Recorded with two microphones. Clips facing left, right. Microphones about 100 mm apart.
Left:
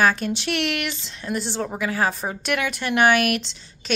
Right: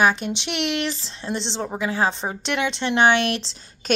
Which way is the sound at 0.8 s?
35° right (ahead or behind).